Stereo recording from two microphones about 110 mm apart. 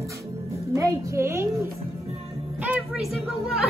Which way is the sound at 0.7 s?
30° right (ahead or behind).